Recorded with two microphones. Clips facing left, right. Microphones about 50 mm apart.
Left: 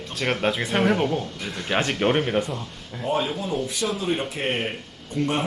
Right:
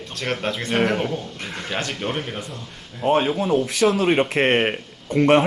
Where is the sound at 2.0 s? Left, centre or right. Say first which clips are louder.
Left 6 dB; left.